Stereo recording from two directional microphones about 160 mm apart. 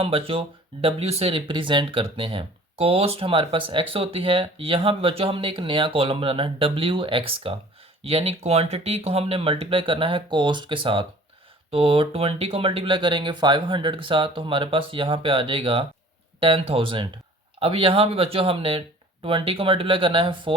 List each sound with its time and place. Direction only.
0.0 s speech: 35° right (ahead or behind)